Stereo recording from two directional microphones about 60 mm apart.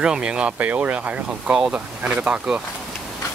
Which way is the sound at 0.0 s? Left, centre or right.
Centre.